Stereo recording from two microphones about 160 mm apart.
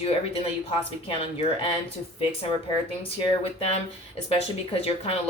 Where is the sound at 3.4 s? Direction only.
40° left (ahead or behind).